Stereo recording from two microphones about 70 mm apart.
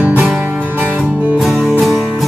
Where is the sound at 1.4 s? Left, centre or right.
Centre.